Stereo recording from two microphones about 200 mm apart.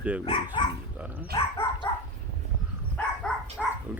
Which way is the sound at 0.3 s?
25° left (ahead or behind).